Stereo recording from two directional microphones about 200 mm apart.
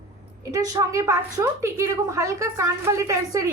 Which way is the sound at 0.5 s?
15° right (ahead or behind).